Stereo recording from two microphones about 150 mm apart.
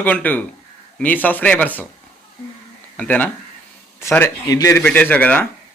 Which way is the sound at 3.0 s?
10° left (ahead or behind).